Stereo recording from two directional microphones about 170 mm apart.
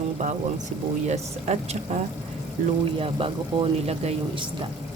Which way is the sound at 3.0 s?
30° right (ahead or behind).